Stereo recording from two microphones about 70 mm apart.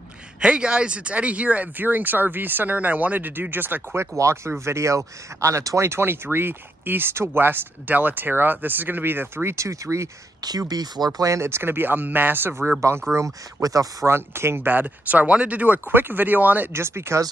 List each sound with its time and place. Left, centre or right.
0.4 s speech: centre; by 4.1 s right
4.2 s speech: right
10.7 s speech: right
13.1 s speech: right
14.0 s speech: right
14.7 s speech: right
16.7 s speech: right